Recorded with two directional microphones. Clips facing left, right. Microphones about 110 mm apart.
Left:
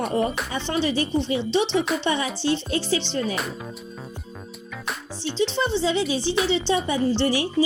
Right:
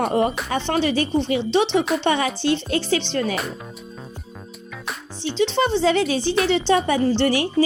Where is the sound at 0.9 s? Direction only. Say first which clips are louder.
Right 3 dB; 80° right.